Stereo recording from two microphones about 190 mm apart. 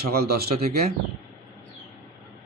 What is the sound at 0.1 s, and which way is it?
Speech, 55° right (ahead or behind).